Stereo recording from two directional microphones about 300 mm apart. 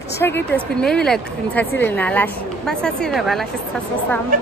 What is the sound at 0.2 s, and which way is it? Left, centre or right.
A woman's voice, centre.